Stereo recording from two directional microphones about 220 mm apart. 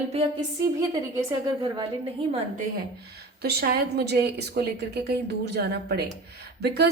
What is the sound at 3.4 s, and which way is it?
A woman's voice, 45° right (ahead or behind).